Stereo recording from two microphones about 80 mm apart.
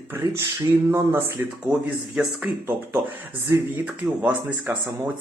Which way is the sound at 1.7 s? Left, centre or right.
Centre.